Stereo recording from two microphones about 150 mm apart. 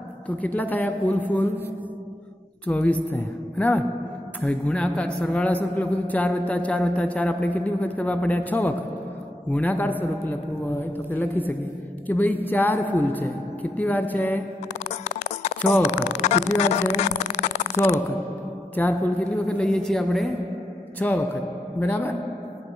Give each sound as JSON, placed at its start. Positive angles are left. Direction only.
{"t": 0.3, "sound": "a man's voice", "side_deg": 10}
{"t": 2.6, "sound": "a man's voice", "side_deg": 10}
{"t": 14.9, "sound": "a sound", "side_deg": 45}
{"t": 15.8, "sound": "speech", "side_deg": 45}
{"t": 18.8, "sound": "a woman's voice", "side_deg": 10}